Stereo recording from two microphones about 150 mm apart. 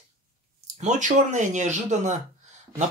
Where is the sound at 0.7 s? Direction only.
55° right (ahead or behind).